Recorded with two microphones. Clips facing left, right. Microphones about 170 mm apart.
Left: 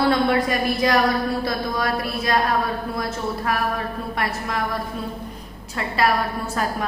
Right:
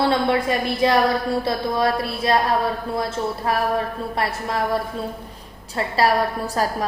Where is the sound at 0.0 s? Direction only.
25° right (ahead or behind).